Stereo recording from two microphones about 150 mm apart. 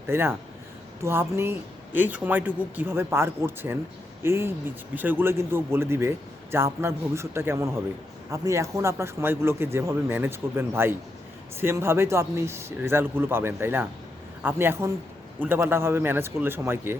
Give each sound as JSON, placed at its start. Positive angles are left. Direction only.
{"t": 0.1, "sound": "speech", "side_deg": -15}